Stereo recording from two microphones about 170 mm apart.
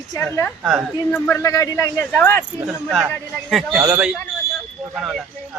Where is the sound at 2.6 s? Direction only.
Centre (ahead or behind).